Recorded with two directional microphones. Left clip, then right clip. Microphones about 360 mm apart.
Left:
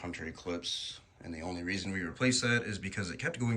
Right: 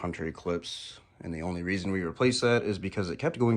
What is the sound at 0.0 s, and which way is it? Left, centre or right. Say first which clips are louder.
Speech: right 6 dB; right.